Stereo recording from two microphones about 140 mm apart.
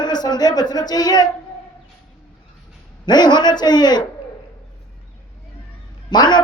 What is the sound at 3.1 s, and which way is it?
Speech, 30° left (ahead or behind).